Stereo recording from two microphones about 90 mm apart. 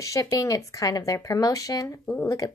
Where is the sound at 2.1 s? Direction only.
25° left (ahead or behind).